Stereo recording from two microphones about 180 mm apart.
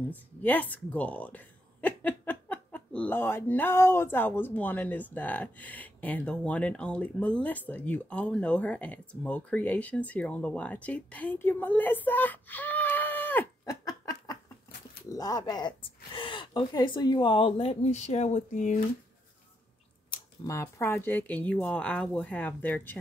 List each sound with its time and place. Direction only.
0.1 s speech: 10° left (ahead or behind); by 18.8 s 45° left (ahead or behind)
20.1 s speech: 15° left (ahead or behind)